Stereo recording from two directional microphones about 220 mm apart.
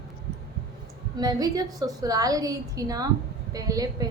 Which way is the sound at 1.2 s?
15° right (ahead or behind).